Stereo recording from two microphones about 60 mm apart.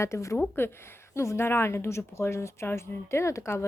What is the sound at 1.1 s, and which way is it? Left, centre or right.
Speech, left.